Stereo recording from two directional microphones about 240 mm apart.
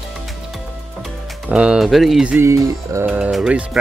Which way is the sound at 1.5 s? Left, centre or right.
Centre.